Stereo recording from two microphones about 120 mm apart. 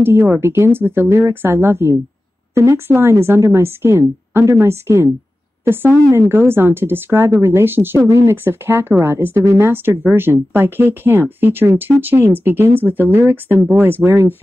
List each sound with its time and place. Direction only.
0.0 s a woman's voice: 20° right (ahead or behind)